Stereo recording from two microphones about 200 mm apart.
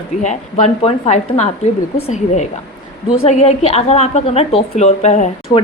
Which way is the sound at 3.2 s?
30° left (ahead or behind).